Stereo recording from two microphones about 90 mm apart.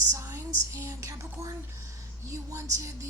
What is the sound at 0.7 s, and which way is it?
Speech, 35° right (ahead or behind).